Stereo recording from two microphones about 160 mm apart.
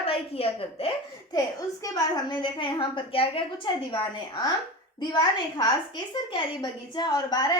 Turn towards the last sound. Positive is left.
turn(degrees=25)  # may be behind; listen again after turning